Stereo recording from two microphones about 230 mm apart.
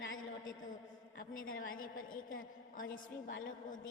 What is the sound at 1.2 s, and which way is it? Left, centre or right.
A woman's voice, left.